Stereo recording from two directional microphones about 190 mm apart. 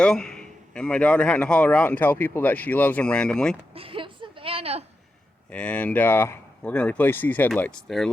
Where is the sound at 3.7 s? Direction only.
30° right (ahead or behind).